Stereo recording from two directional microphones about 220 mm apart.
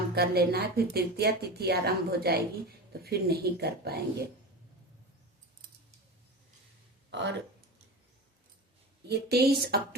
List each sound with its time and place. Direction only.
0.1 s a woman's voice: 45° right (ahead or behind)
7.1 s speech: 55° right (ahead or behind)
9.0 s a woman's voice: 45° right (ahead or behind)